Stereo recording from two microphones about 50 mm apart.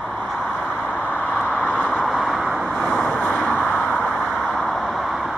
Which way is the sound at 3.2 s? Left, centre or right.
Left.